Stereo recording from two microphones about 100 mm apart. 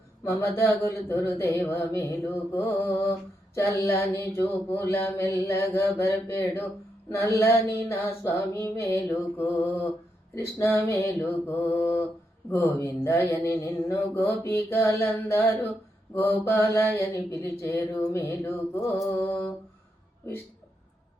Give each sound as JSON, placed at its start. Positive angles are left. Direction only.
{"t": 0.3, "sound": "mantra", "side_deg": 30}
{"t": 19.2, "sound": "mantra", "side_deg": 15}